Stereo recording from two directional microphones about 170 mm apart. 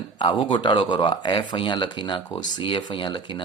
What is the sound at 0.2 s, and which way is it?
Speech, 30° left (ahead or behind).